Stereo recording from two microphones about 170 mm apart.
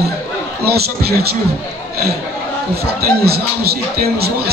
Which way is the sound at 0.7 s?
65° right (ahead or behind).